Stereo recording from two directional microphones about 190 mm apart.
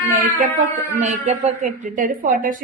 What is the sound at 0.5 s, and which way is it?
A woman's voice, 35° right (ahead or behind).